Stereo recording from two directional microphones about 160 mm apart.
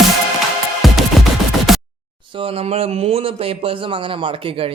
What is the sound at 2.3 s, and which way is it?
Speech, 35° right (ahead or behind).